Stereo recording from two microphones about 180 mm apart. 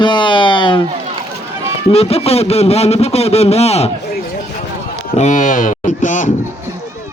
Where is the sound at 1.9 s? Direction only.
35° left (ahead or behind).